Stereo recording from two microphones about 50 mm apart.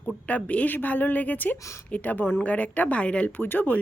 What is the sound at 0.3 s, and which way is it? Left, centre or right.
A woman's voice, left.